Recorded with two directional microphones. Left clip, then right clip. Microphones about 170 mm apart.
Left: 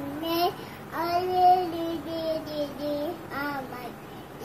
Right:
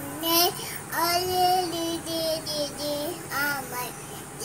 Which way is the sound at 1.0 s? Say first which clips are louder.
Left 2 dB; centre (ahead or behind).